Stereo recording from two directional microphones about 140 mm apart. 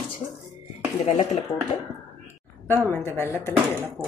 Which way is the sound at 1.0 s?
50° left (ahead or behind).